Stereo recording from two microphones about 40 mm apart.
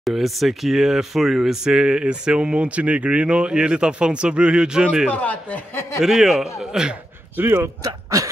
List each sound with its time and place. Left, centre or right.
0.0 s speech: centre
1.6 s speech: centre
5.1 s speech: left
5.9 s a man's voice: centre
7.3 s speech: right